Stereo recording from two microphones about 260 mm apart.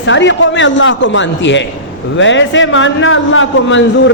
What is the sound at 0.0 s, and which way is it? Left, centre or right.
A man's voice, left.